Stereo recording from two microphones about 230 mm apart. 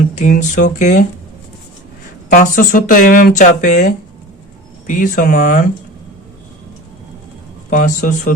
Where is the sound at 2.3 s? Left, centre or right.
Left.